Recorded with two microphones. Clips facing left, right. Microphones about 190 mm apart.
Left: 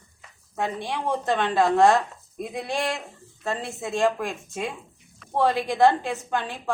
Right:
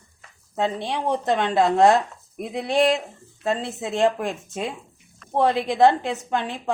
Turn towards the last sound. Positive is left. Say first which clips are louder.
# right 2 dB
turn(degrees=-20)  # may be behind; listen again after turning